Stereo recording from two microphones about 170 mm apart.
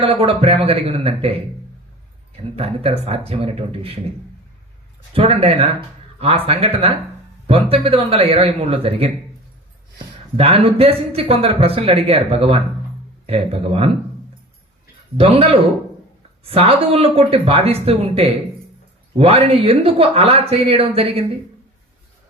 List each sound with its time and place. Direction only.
0.0 s speech: 35° right (ahead or behind)
5.1 s speech: 35° right (ahead or behind)
10.3 s speech: 35° right (ahead or behind)
15.2 s speech: 35° right (ahead or behind)